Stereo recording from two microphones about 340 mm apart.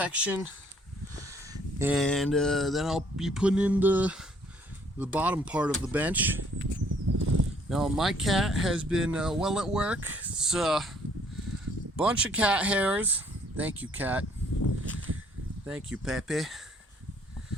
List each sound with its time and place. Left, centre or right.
0.0 s speech: centre
6.8 s bird flight: right
7.7 s speech: centre
11.9 s speech: centre
15.6 s speech: centre